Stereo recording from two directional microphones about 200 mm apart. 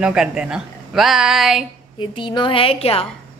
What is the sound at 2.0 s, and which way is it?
A woman's voice, 25° left (ahead or behind).